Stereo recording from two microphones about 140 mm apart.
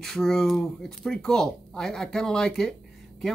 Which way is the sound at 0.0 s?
Centre (ahead or behind).